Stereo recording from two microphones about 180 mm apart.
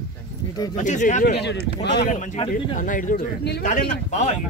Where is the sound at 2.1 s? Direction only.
45° left (ahead or behind); by 3.6 s 60° left (ahead or behind).